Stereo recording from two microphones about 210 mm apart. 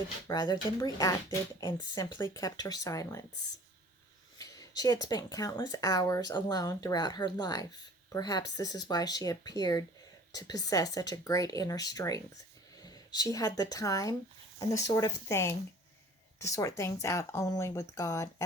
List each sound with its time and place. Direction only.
0.3 s speech: 20° left (ahead or behind)
4.4 s speech: 15° left (ahead or behind)